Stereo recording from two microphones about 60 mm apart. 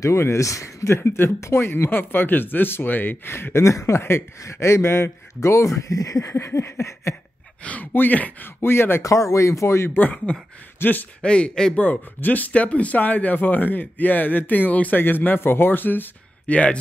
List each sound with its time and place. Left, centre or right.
0.0 s speech: left
5.9 s speech: left
6.3 s speech: left
7.6 s speech: left
8.5 s speech: left
9.0 s speech: left
9.8 s speech: left
11.2 s speech: centre
11.8 s speech: left
16.5 s speech: left